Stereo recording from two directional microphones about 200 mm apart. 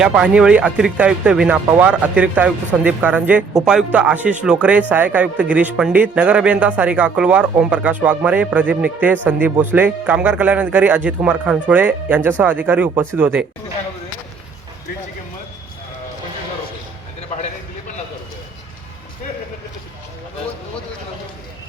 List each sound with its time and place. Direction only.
0.0 s speech: 5° right (ahead or behind)
17.2 s music: 35° left (ahead or behind)